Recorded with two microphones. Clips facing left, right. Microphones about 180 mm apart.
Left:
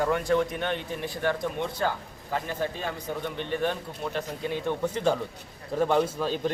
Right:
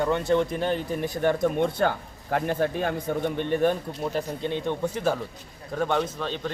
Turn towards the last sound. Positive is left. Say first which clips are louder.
# left 3 dB
turn(degrees=5)  # may be behind; listen again after turning